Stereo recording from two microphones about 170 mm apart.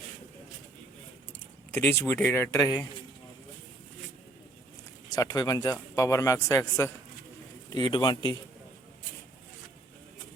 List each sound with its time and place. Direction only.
1.7 s speech: 15° left (ahead or behind)
5.1 s speech: 20° left (ahead or behind)